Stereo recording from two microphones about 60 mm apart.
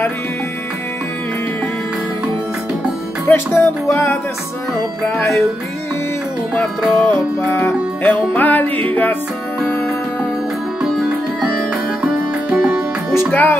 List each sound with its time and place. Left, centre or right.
3.3 s music: left
6.6 s music: centre
7.0 s music: left
12.5 s music: right
13.3 s music: left